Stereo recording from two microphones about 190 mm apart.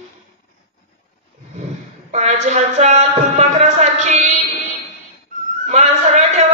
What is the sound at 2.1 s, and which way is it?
Music, 35° right (ahead or behind).